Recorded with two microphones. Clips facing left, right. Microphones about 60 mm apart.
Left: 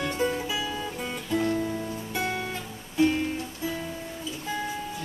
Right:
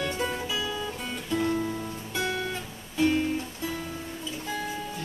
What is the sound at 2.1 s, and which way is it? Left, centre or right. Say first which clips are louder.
Guitar: right 1 dB; centre.